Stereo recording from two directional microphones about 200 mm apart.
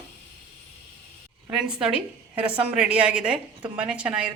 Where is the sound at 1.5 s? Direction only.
5° right (ahead or behind).